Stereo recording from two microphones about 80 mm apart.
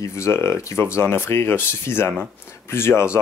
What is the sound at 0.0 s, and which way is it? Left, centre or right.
Speech, left.